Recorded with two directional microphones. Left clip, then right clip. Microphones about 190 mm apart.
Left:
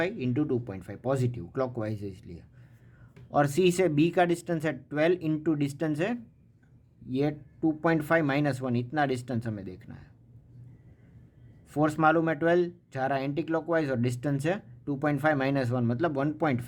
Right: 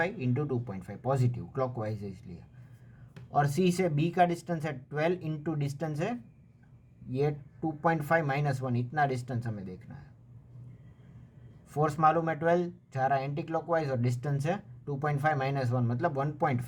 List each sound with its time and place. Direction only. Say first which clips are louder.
0.0 s speech: left 2 dB; 35° left (ahead or behind)
3.3 s speech: left 4 dB; 40° left (ahead or behind)
11.7 s speech: left 2 dB; 35° left (ahead or behind)